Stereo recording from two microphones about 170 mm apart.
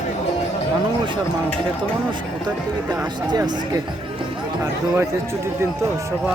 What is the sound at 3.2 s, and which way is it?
Speech, 25° right (ahead or behind).